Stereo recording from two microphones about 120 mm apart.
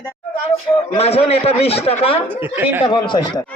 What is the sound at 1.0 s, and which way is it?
A man's voice, 60° left (ahead or behind).